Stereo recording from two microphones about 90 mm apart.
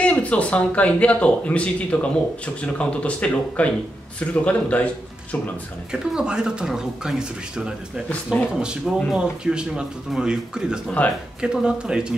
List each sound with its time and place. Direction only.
0.0 s speech: 15° left (ahead or behind)
5.9 s speech: 10° right (ahead or behind)
11.0 s speech: 15° left (ahead or behind)
11.4 s speech: 10° right (ahead or behind)